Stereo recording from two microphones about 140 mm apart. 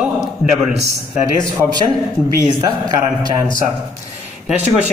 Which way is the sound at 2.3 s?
30° right (ahead or behind).